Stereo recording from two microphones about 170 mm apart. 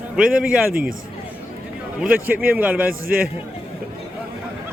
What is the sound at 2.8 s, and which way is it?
Speech, 60° right (ahead or behind).